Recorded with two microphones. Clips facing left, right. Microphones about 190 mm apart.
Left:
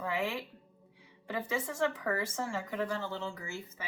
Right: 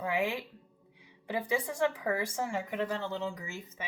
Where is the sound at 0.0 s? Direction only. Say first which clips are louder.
Right 3 dB; 15° right (ahead or behind).